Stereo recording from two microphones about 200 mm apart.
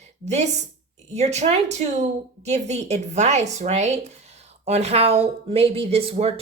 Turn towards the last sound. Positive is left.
turn(degrees=-30)  # may be behind; listen again after turning